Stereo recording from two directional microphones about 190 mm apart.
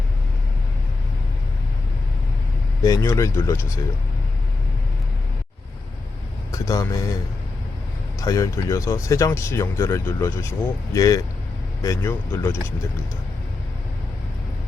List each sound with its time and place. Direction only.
2.8 s speech: 15° left (ahead or behind)
6.5 s speech: 15° left (ahead or behind)
8.2 s speech: 20° left (ahead or behind)